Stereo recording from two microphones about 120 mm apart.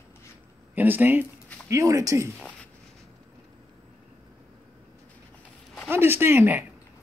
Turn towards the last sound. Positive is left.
turn(degrees=-15)  # may be behind; listen again after turning